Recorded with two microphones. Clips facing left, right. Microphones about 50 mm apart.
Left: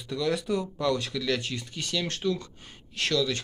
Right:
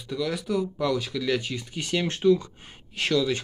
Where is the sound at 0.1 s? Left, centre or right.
Centre.